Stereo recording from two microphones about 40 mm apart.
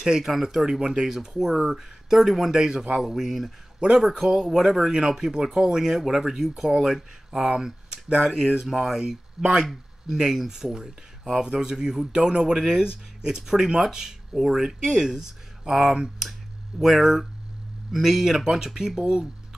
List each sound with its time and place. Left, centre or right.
0.0 s speech: centre
2.5 s speech: centre
6.8 s speech: centre
7.4 s speech: centre
12.1 s speech: right